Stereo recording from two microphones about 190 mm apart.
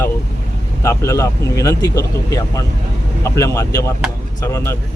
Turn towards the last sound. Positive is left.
turn(degrees=15)  # may be behind; listen again after turning